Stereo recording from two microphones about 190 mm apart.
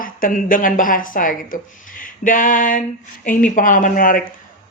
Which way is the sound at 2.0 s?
45° left (ahead or behind).